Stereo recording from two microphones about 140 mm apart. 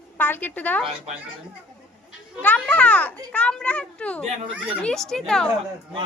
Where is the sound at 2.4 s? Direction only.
10° left (ahead or behind).